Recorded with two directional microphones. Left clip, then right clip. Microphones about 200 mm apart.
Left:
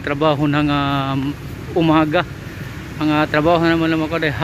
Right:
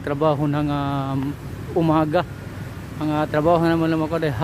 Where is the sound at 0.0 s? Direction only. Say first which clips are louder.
Left 3 dB; 15° right (ahead or behind).